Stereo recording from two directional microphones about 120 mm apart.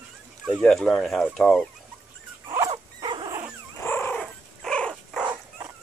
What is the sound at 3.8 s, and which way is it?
Cat, 20° left (ahead or behind).